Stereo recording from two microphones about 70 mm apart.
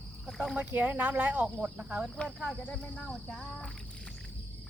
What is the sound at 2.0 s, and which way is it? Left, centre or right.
A child's voice, centre.